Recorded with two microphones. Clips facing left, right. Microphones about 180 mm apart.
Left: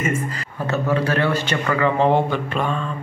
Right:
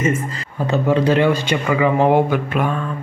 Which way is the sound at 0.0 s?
25° right (ahead or behind).